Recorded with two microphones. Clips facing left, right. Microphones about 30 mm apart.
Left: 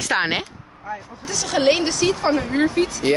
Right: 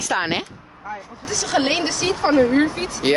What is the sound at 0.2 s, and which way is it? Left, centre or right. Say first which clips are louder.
Speech: left 1 dB; centre.